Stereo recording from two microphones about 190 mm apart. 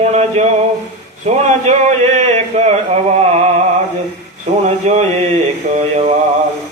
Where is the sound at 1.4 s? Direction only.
35° right (ahead or behind).